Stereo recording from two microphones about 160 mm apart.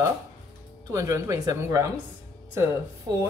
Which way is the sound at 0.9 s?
20° right (ahead or behind).